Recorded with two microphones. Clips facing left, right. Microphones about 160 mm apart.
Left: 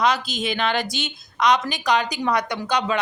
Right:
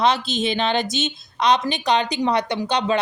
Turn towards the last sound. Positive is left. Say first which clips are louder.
# right 2 dB
turn(degrees=-30)  # may be behind; listen again after turning